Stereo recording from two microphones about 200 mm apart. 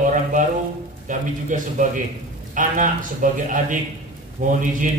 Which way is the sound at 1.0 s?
40° right (ahead or behind).